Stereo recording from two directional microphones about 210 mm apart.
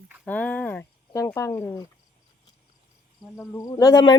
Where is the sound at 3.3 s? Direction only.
15° left (ahead or behind).